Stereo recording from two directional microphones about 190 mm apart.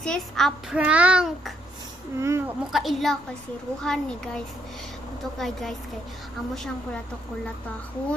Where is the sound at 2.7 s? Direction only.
Centre (ahead or behind).